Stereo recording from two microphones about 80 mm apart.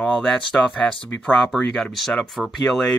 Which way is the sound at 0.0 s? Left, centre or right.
Centre.